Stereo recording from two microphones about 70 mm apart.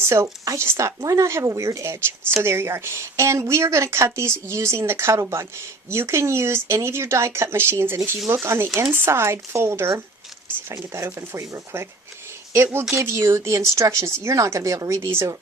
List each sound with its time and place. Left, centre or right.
0.0 s speech: right
12.9 s speech: right